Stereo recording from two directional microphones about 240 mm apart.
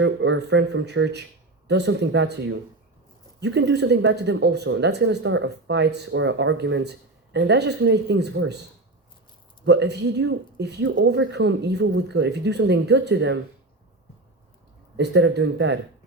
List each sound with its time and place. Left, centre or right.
0.0 s speech: right
9.6 s speech: right
14.9 s speech: right